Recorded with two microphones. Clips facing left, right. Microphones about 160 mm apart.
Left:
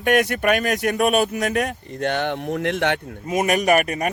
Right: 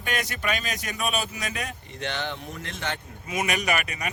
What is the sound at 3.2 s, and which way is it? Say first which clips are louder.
Speech: left 8 dB; 45° left (ahead or behind).